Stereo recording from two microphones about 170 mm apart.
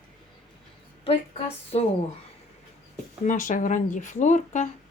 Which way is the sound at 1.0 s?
35° left (ahead or behind).